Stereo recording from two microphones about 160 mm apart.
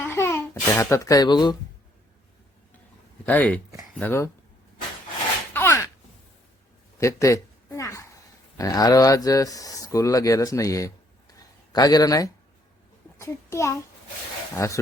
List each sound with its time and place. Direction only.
0.0 s babbling: 15° left (ahead or behind)
3.2 s speech: 10° left (ahead or behind)
5.5 s a sound: 15° left (ahead or behind)
7.0 s a child's voice: 20° left (ahead or behind)